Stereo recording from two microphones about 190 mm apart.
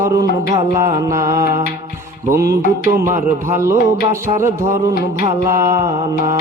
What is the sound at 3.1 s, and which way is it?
Music, 15° right (ahead or behind).